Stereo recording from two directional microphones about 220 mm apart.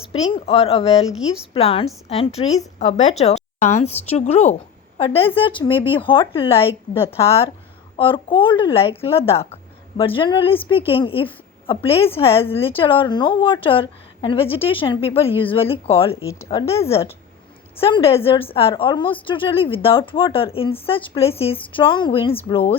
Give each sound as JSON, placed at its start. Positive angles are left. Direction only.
{"t": 0.1, "sound": "a woman's voice", "side_deg": 25}
{"t": 16.2, "sound": "speech", "side_deg": 15}
{"t": 16.5, "sound": "a woman's voice", "side_deg": 25}